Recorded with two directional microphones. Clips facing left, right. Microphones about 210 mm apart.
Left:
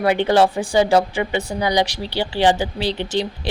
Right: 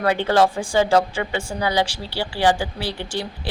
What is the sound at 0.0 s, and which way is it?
Speech, 15° left (ahead or behind).